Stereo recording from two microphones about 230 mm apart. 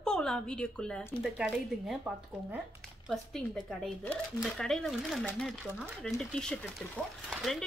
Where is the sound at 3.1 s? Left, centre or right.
Centre.